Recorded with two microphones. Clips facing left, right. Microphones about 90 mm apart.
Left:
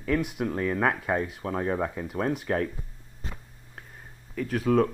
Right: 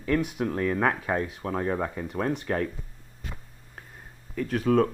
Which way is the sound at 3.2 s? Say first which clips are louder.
Even; 30° left (ahead or behind).